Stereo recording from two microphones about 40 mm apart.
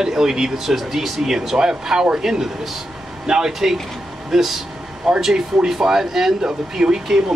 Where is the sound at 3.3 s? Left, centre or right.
Centre.